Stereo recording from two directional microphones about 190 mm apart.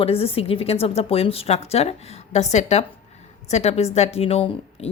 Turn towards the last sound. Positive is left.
turn(degrees=30)  # may be behind; listen again after turning